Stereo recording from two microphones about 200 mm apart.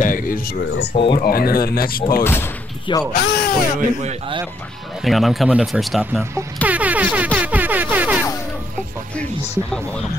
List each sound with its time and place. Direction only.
0.0 s speech: 45° left (ahead or behind)
0.9 s speech: 25° left (ahead or behind)
1.2 s speech: 50° left (ahead or behind)
2.2 s speech: 10° left (ahead or behind)
3.1 s speech: 50° left (ahead or behind)
4.0 s a man's voice: 35° right (ahead or behind)
5.0 s speech: centre (ahead or behind)
6.3 s music: 5° right (ahead or behind)